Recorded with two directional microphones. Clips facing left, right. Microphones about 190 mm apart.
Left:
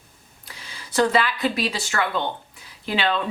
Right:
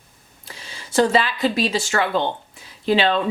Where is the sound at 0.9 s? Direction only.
25° right (ahead or behind).